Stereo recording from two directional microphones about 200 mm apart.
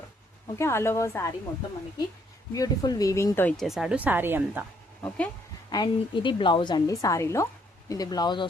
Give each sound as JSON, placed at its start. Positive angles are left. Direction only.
{"t": 0.6, "sound": "speech", "side_deg": 10}
{"t": 2.6, "sound": "speech", "side_deg": 20}
{"t": 3.7, "sound": "speech", "side_deg": -5}
{"t": 5.0, "sound": "speech", "side_deg": 5}
{"t": 5.7, "sound": "a woman's voice", "side_deg": 20}